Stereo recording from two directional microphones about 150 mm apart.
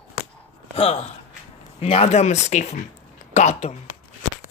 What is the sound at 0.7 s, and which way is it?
Speech, 40° left (ahead or behind).